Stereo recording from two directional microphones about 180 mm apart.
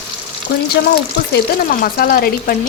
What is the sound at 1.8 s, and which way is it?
Speech, 55° left (ahead or behind).